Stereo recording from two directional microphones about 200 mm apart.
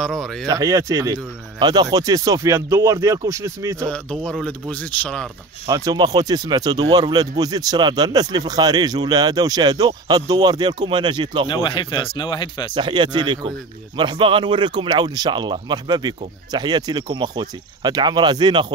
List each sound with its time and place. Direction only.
0.0 s speech: centre (ahead or behind)
0.5 s speech: 15° right (ahead or behind)
3.9 s speech: 5° left (ahead or behind)
5.7 s speech: 20° right (ahead or behind)
11.4 s speech: 25° left (ahead or behind)
12.7 s speech: 25° right (ahead or behind)